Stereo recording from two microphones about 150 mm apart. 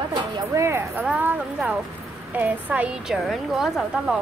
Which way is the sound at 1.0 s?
5° right (ahead or behind).